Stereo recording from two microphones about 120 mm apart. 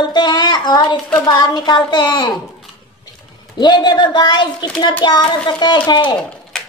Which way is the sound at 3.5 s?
40° left (ahead or behind).